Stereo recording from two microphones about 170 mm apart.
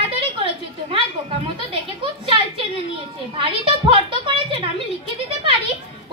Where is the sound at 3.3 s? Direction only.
30° right (ahead or behind).